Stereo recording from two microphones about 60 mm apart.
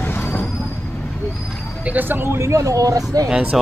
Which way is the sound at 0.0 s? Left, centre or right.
Left.